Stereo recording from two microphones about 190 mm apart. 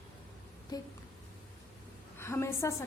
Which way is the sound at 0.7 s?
20° left (ahead or behind).